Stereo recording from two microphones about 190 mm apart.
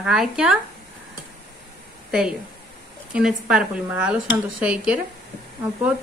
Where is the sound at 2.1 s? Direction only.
5° right (ahead or behind).